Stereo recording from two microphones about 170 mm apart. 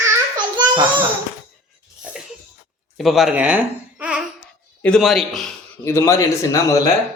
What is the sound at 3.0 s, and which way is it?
A man's voice, centre (ahead or behind).